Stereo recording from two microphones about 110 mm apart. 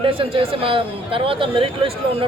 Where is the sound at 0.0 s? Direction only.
55° right (ahead or behind).